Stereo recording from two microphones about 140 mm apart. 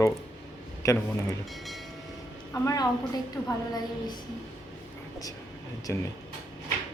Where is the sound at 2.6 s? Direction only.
30° left (ahead or behind).